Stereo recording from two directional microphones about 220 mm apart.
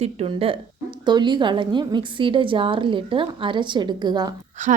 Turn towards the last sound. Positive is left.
turn(degrees=-35)  # may be behind; listen again after turning